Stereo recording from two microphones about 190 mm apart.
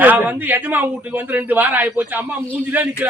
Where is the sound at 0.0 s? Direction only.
10° right (ahead or behind).